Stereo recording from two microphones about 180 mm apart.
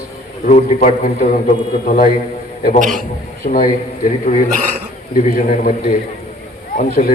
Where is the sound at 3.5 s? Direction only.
45° left (ahead or behind).